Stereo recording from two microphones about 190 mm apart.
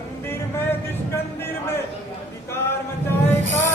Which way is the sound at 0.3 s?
10° left (ahead or behind).